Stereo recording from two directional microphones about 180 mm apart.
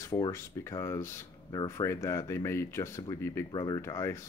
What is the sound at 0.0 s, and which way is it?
Speech, 15° left (ahead or behind).